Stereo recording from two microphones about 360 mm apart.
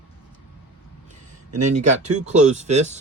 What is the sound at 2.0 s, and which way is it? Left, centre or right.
Speech, centre.